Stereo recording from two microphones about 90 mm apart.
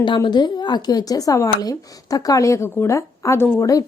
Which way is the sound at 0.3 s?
55° left (ahead or behind).